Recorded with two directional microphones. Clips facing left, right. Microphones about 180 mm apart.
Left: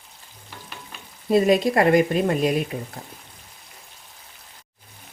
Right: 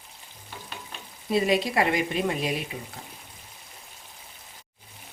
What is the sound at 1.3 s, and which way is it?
Speech, 45° left (ahead or behind).